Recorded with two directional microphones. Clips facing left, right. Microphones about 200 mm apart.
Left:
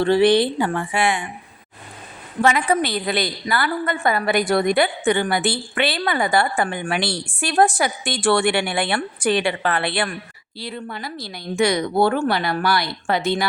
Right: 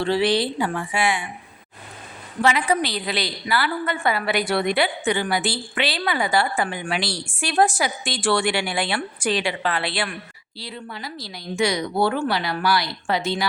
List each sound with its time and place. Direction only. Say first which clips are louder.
0.0 s a woman's voice: left 5 dB; 50° left (ahead or behind)
2.4 s a woman's voice: left 2 dB; 50° left (ahead or behind)